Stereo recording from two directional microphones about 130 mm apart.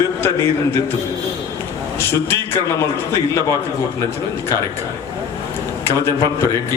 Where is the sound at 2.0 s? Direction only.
20° left (ahead or behind).